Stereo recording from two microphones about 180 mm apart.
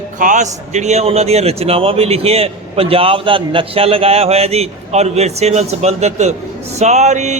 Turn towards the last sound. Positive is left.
turn(degrees=-40)  # may be behind; listen again after turning